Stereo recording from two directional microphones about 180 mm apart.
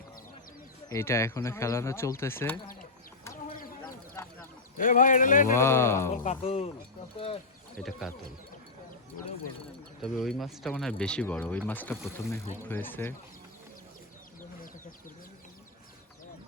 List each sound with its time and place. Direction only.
0.9 s speech: 15° left (ahead or behind)
3.5 s bird: 50° left (ahead or behind)
4.2 s a sound: 15° left (ahead or behind)
4.8 s speech: 45° left (ahead or behind)
5.5 s speech: 15° left (ahead or behind)
6.2 s speech: 35° left (ahead or behind)
7.8 s speech: centre (ahead or behind)
10.0 s speech: centre (ahead or behind)